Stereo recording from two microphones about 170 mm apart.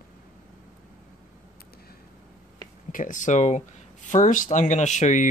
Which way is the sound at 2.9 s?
50° left (ahead or behind).